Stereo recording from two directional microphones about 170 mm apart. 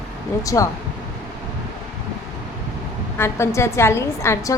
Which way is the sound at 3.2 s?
15° left (ahead or behind).